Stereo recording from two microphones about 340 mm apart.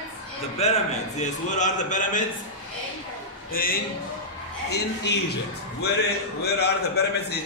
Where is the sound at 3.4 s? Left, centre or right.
Left.